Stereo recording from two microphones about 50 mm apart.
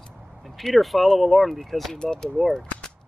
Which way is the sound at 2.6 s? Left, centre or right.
Centre.